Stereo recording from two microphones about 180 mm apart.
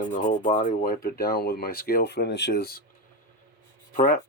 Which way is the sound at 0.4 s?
45° left (ahead or behind).